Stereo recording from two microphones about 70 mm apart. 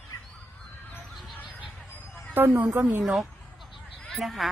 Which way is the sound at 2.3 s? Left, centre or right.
Right.